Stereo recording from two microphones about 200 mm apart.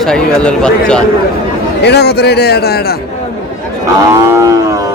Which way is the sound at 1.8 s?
55° left (ahead or behind).